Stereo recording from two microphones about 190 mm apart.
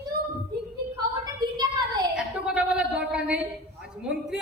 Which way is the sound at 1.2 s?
20° right (ahead or behind).